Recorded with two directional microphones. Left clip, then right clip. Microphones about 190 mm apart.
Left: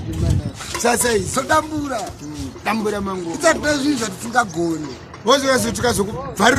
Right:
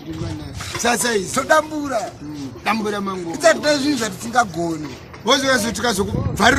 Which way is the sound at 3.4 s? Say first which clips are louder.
Right 2 dB; 15° right (ahead or behind).